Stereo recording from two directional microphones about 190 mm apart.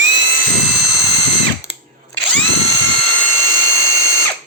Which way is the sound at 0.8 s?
25° left (ahead or behind).